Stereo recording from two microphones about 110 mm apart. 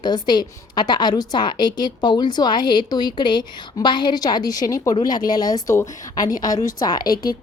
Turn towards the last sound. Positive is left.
turn(degrees=40)  # may be behind; listen again after turning